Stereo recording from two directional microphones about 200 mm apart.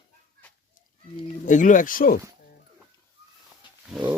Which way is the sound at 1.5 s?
40° left (ahead or behind).